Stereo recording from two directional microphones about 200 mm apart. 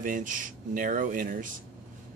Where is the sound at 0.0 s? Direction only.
40° right (ahead or behind).